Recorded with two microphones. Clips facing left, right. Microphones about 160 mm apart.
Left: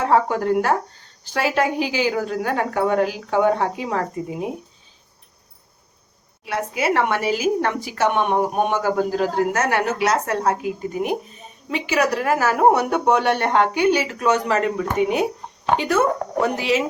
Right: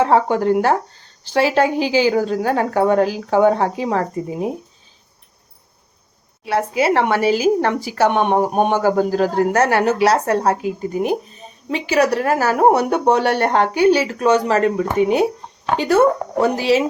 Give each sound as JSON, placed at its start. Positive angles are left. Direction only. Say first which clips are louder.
{"t": 0.0, "sound": "a woman's voice", "louder": "right 3 dB", "side_deg": -30}
{"t": 6.4, "sound": "a woman's voice", "louder": "right 5 dB", "side_deg": -30}